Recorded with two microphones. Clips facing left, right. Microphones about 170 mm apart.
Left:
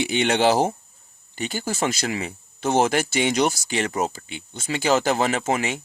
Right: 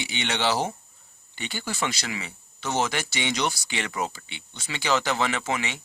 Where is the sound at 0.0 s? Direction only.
50° left (ahead or behind).